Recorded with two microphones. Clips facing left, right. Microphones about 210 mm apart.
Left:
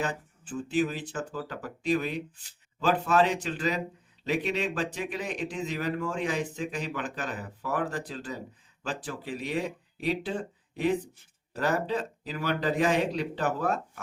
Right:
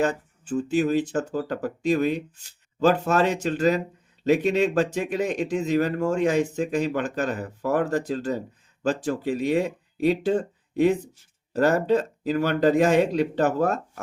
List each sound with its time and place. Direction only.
0.0 s speech: 45° right (ahead or behind)